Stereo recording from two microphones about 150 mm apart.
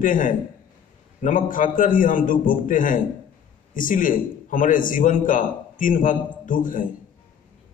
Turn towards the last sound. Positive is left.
turn(degrees=65)  # may be behind; listen again after turning